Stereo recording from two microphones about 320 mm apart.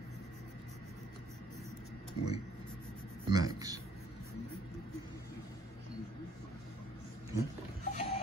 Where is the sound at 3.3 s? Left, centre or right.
Centre.